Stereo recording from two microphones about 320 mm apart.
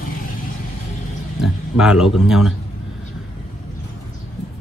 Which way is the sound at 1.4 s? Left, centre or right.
Centre.